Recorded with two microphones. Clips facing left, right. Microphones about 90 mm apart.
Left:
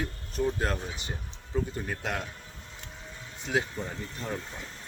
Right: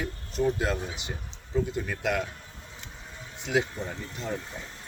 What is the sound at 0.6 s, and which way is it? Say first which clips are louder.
Speech: right 2 dB; 45° left (ahead or behind).